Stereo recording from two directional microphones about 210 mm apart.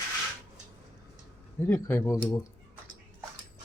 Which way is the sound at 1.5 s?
10° left (ahead or behind).